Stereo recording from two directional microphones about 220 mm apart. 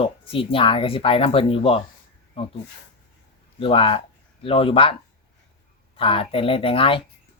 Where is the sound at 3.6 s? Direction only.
25° left (ahead or behind).